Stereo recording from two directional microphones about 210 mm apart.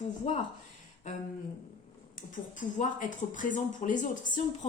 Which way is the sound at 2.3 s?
40° left (ahead or behind).